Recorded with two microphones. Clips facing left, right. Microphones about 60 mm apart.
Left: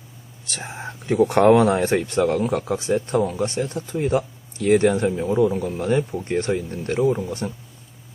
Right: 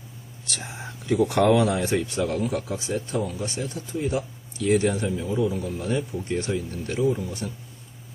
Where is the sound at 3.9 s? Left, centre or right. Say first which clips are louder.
Left 4 dB; left.